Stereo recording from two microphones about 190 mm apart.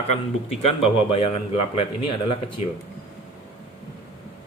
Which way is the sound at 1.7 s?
30° left (ahead or behind).